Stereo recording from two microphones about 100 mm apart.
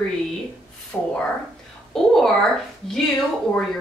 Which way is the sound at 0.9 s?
25° left (ahead or behind).